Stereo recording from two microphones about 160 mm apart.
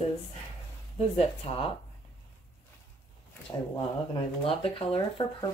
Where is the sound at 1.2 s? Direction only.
35° left (ahead or behind).